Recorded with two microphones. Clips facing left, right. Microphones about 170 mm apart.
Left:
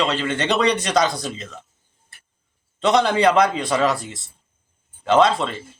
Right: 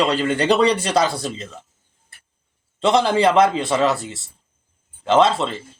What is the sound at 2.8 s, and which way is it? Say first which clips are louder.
Speech: right 1 dB; 30° right (ahead or behind).